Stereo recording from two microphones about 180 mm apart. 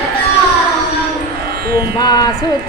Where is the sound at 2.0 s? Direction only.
20° left (ahead or behind).